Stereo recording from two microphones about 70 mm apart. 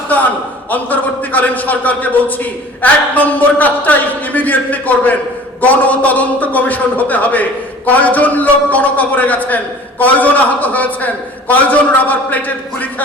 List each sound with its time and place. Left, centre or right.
0.7 s a man's voice: left